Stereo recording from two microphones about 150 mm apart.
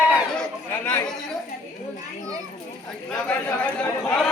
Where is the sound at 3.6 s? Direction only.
10° left (ahead or behind).